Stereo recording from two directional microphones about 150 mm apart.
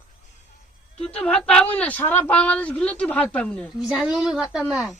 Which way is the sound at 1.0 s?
10° left (ahead or behind).